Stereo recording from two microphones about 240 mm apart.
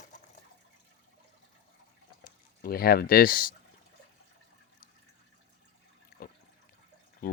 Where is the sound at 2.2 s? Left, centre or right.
Left.